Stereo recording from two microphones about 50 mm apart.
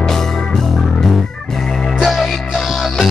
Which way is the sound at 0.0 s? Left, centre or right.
Centre.